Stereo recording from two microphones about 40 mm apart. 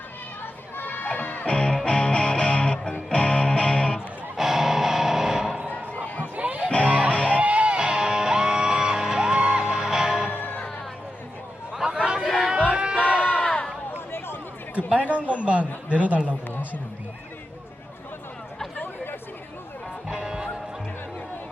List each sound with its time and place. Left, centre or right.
0.8 s crowd: left
1.2 s music: left
1.5 s music: left
3.9 s music: centre
5.5 s a sound: right
6.3 s music: right
6.7 s music: left
7.3 s music: right; by 10.2 s centre
11.9 s chatter: right
12.7 s a sound: right
13.4 s run: left
14.8 s a sound: right
20.1 s music: centre